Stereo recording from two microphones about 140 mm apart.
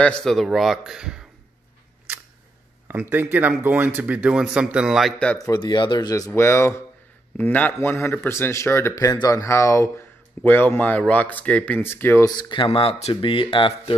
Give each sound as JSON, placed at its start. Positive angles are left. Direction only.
{"t": 0.0, "sound": "a man's voice", "side_deg": 5}
{"t": 2.9, "sound": "speech", "side_deg": -15}
{"t": 5.4, "sound": "speech", "side_deg": 30}
{"t": 12.3, "sound": "speech", "side_deg": 30}